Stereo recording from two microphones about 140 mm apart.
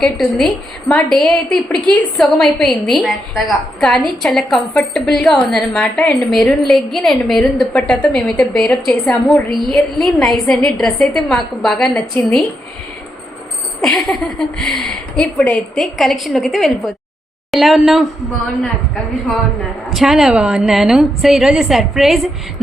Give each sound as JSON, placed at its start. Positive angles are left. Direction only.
{"t": 0.0, "sound": "a woman's voice", "side_deg": 5}
{"t": 13.8, "sound": "a woman's voice", "side_deg": 0}
{"t": 19.9, "sound": "a woman's voice", "side_deg": 0}